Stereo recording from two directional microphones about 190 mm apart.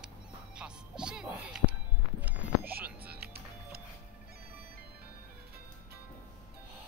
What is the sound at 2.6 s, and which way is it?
Music, 55° right (ahead or behind).